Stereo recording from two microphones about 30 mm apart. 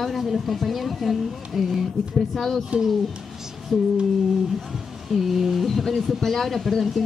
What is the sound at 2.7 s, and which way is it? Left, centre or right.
Speech, right.